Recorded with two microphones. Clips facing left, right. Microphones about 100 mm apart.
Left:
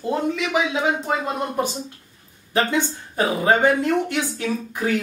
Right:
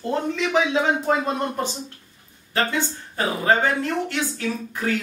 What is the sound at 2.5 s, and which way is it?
Speech, 20° left (ahead or behind).